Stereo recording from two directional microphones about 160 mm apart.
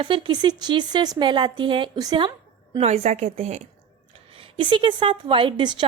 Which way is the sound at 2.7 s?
40° right (ahead or behind).